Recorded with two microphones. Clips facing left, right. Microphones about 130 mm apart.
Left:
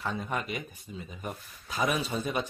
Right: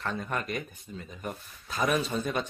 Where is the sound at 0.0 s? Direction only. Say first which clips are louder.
Even; 5° left (ahead or behind).